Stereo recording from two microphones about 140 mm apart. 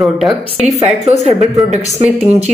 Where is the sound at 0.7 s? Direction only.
55° right (ahead or behind).